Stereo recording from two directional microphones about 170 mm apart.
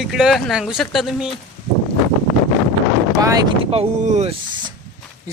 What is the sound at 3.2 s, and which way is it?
Speech, 20° right (ahead or behind).